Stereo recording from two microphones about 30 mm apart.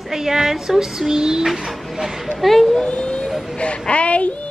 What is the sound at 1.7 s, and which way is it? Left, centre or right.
Speech, centre.